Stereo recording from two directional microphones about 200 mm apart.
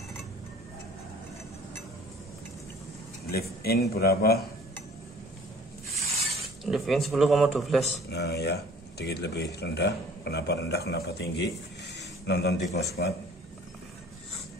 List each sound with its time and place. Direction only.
3.3 s speech: 50° left (ahead or behind)
6.6 s speech: centre (ahead or behind)
8.1 s speech: 55° left (ahead or behind)